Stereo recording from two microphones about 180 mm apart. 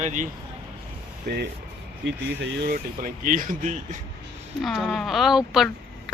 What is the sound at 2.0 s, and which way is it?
Speech, 80° right.